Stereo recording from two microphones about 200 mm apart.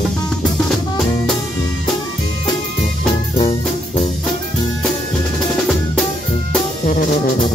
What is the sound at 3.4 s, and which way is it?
Music, 30° left (ahead or behind).